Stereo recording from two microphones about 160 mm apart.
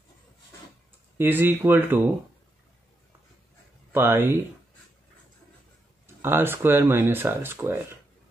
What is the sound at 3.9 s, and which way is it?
Speech, 15° right (ahead or behind).